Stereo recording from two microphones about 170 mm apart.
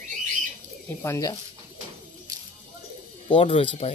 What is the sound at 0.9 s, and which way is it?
Speech, 15° left (ahead or behind).